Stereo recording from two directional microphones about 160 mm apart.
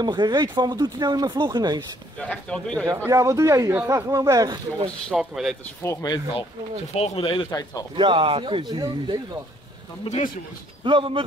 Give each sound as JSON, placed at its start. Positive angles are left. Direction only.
{"t": 0.0, "sound": "speech", "side_deg": -25}
{"t": 2.1, "sound": "speech", "side_deg": 10}
{"t": 3.1, "sound": "speech", "side_deg": -20}
{"t": 5.1, "sound": "speech", "side_deg": -5}
{"t": 5.9, "sound": "speech", "side_deg": 25}
{"t": 6.9, "sound": "speech", "side_deg": 35}
{"t": 7.9, "sound": "speech", "side_deg": -30}
{"t": 10.0, "sound": "speech", "side_deg": 45}
{"t": 10.8, "sound": "speech", "side_deg": -30}